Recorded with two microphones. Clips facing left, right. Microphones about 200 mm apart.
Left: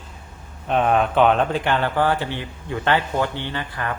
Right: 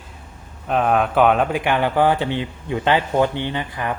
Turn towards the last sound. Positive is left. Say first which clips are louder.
# right 3 dB
turn(degrees=-15)  # may be behind; listen again after turning